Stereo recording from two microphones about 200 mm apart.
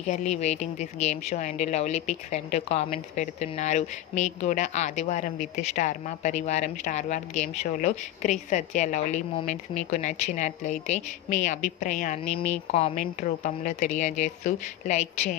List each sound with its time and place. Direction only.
0.1 s speech: 35° left (ahead or behind)
12.2 s speech: 5° left (ahead or behind)
12.7 s speech: 35° left (ahead or behind)